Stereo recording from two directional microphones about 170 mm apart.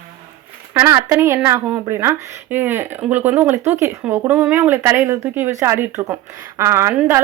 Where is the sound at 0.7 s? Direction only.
15° right (ahead or behind).